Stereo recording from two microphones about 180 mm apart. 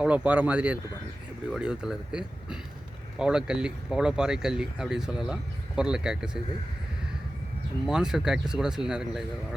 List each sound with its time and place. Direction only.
0.0 s speech: 5° right (ahead or behind)
7.9 s speech: 5° right (ahead or behind)